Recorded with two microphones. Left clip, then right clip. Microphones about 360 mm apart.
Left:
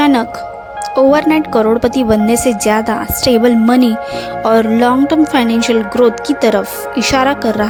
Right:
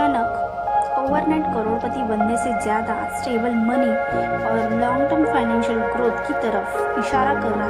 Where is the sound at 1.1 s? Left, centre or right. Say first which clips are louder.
Left 9 dB; left.